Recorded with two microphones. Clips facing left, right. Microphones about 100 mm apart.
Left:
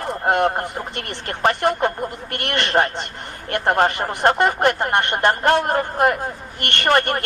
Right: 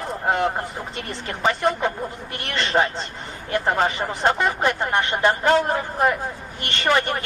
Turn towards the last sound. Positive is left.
turn(degrees=60)  # may be behind; listen again after turning